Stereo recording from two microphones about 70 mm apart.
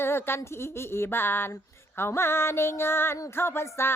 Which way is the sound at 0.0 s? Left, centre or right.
Left.